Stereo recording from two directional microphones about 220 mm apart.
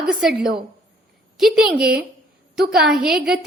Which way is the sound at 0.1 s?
5° right (ahead or behind).